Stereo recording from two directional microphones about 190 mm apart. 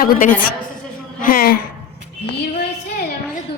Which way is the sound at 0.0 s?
45° left (ahead or behind).